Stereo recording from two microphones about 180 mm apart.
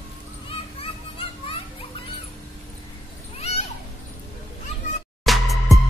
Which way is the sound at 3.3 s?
35° left (ahead or behind).